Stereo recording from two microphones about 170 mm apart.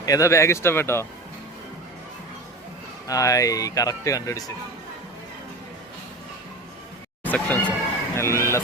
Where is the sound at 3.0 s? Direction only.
20° left (ahead or behind).